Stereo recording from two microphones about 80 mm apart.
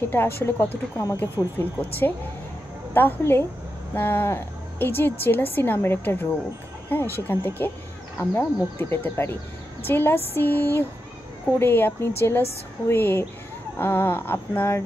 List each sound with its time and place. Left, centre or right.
0.1 s a woman's voice: left